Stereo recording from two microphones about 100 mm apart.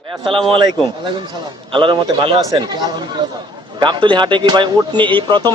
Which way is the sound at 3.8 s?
50° right (ahead or behind).